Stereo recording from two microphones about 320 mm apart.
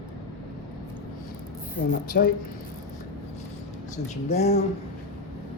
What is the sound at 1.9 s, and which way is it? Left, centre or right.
Speech, left.